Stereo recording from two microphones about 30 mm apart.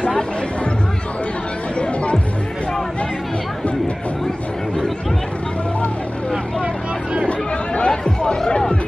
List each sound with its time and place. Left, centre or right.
1.8 s music: left
7.2 s music: left